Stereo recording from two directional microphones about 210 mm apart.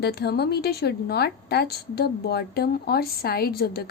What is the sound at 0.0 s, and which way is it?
A woman's voice, 50° left (ahead or behind).